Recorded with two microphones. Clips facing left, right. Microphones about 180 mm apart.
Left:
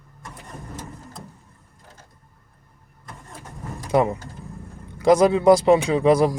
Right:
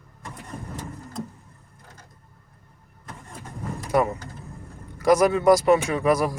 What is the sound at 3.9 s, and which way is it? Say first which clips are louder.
A man's voice: left 3 dB; 20° left (ahead or behind).